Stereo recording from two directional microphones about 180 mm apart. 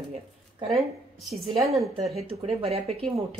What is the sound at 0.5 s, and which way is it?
Speech, 35° right (ahead or behind).